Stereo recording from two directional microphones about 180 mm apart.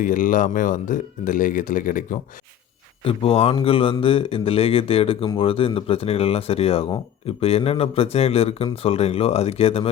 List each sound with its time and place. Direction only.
0.0 s speech: 50° left (ahead or behind)
3.0 s speech: 30° left (ahead or behind)